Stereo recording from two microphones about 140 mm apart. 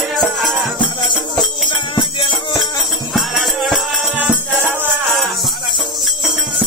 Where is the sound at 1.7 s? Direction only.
35° left (ahead or behind).